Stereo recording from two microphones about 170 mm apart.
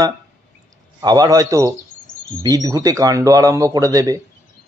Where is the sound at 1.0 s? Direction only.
25° right (ahead or behind).